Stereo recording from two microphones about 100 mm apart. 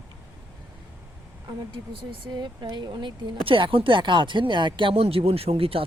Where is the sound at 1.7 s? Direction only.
55° right (ahead or behind).